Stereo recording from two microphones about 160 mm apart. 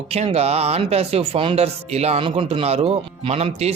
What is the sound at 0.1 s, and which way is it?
Speech, 40° right (ahead or behind).